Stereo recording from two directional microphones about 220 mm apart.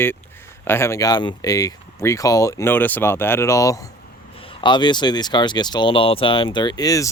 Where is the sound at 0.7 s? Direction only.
10° left (ahead or behind).